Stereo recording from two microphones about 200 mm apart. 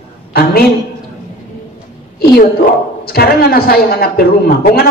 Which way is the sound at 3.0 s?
50° left (ahead or behind).